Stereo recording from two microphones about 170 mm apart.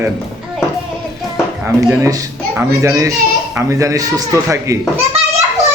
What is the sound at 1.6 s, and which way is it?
A man's voice, 15° right (ahead or behind).